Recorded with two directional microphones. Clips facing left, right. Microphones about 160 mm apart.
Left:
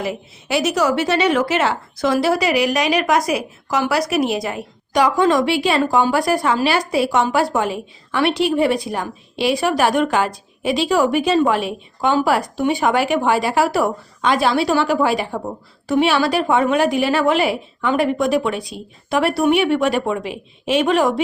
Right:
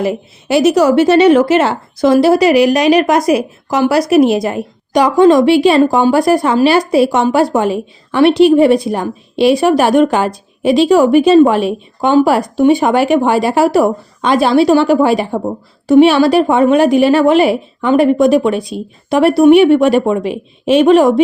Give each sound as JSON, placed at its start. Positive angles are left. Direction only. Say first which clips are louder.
{"t": 0.0, "sound": "a woman's voice", "louder": "right 8 dB", "side_deg": -40}
{"t": 3.2, "sound": "a woman's voice", "louder": "right 8 dB", "side_deg": -45}